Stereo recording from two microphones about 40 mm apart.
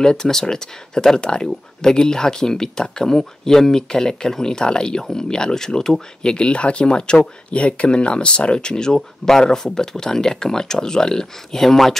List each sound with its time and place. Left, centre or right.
0.0 s speech: centre
6.3 s speech: left; by 12.0 s centre